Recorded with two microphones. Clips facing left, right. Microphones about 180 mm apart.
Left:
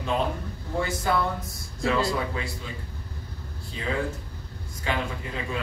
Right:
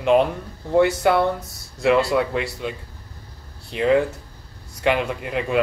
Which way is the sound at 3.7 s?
75° right (ahead or behind).